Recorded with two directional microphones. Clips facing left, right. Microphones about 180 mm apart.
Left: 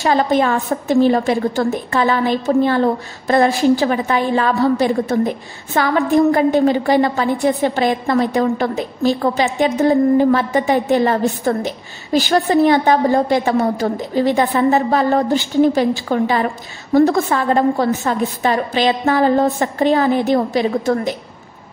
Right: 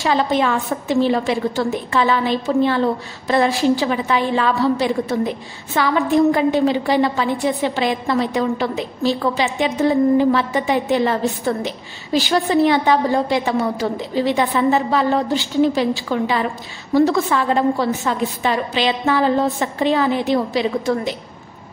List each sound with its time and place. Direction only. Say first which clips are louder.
0.0 s a woman's voice: left 3 dB; 45° left (ahead or behind)